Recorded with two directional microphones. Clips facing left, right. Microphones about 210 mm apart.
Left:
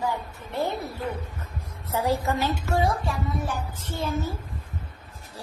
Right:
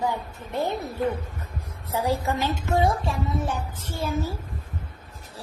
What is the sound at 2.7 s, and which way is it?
Speech, 25° right (ahead or behind).